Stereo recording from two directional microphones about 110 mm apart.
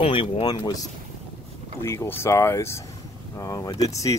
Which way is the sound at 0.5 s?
35° left (ahead or behind).